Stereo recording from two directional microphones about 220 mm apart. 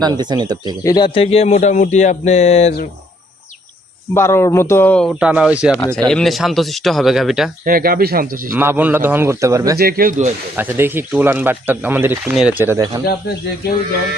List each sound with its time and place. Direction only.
0.0 s speech: 20° right (ahead or behind)
0.9 s speech: 20° left (ahead or behind)
4.1 s speech: 10° left (ahead or behind)
7.6 s speech: 40° right (ahead or behind)
8.4 s speech: 10° right (ahead or behind)
9.7 s speech: 40° right (ahead or behind)
10.6 s speech: 10° right (ahead or behind)
13.1 s speech: 45° left (ahead or behind)